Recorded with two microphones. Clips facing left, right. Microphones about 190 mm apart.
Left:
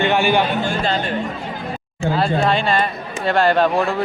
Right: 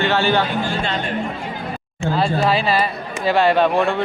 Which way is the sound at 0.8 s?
35° left (ahead or behind).